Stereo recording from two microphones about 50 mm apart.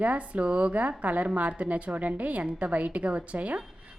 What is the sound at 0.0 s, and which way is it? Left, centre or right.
A woman's voice, right.